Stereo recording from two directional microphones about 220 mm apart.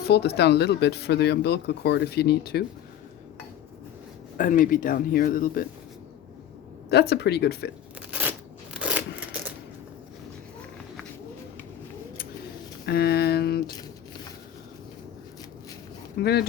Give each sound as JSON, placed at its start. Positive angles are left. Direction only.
{"t": 0.1, "sound": "speech", "side_deg": 50}
{"t": 4.4, "sound": "speech", "side_deg": 40}
{"t": 6.9, "sound": "speech", "side_deg": 45}
{"t": 8.1, "sound": "scissors", "side_deg": -10}
{"t": 8.8, "sound": "a sound", "side_deg": -5}
{"t": 12.8, "sound": "speech", "side_deg": 45}
{"t": 16.2, "sound": "speech", "side_deg": 45}